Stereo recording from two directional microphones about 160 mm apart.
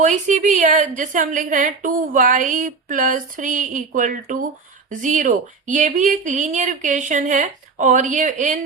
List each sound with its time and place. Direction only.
0.0 s a woman's voice: 50° right (ahead or behind)